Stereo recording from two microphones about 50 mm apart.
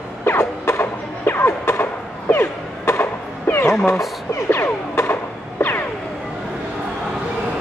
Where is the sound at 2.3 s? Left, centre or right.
Left.